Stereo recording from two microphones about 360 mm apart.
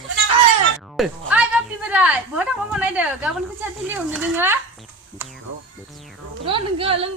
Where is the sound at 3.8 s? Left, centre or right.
Centre.